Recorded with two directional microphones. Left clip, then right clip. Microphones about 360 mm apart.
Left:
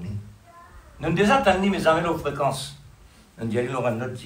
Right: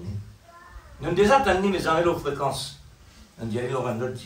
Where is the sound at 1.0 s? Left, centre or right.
Left.